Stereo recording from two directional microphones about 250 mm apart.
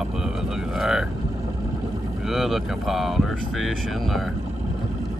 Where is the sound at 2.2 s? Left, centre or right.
Centre.